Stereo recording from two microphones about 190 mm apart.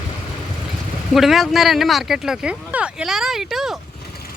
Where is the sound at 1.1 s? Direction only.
Centre (ahead or behind).